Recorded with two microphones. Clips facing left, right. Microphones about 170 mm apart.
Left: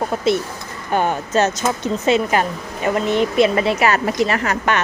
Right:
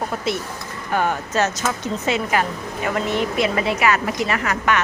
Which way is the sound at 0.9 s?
25° left (ahead or behind).